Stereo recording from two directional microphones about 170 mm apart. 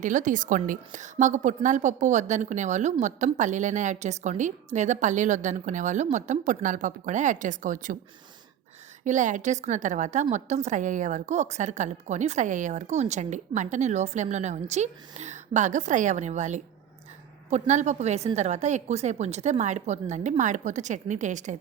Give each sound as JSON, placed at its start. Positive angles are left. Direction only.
{"t": 0.0, "sound": "a woman's voice", "side_deg": -50}
{"t": 9.0, "sound": "a woman's voice", "side_deg": -45}